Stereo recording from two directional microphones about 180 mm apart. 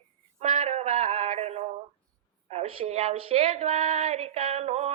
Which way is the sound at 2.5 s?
35° right (ahead or behind).